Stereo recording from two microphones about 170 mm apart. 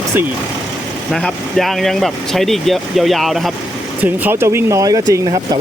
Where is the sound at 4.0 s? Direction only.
15° right (ahead or behind).